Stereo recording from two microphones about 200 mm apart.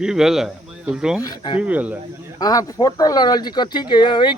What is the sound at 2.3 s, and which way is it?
Speech, 20° left (ahead or behind).